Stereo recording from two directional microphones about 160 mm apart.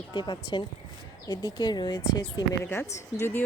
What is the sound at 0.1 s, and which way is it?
A woman's voice, 30° left (ahead or behind).